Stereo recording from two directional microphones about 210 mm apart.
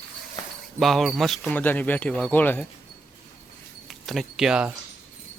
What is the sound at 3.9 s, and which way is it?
Speech, centre (ahead or behind).